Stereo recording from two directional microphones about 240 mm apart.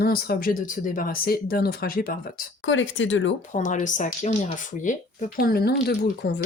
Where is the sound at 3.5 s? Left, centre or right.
Left.